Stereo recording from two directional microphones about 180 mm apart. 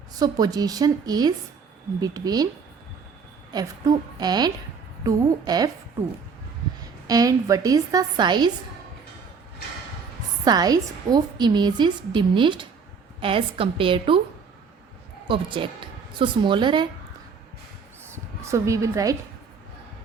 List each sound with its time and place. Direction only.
0.2 s a woman's voice: 20° right (ahead or behind)
3.5 s a woman's voice: 20° right (ahead or behind)
7.1 s a woman's voice: 20° right (ahead or behind)
10.4 s a woman's voice: 20° right (ahead or behind)
15.3 s a woman's voice: 30° right (ahead or behind)
18.0 s a sound: 15° right (ahead or behind)